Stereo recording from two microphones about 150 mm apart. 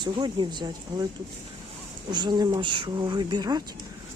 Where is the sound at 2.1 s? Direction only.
30° right (ahead or behind).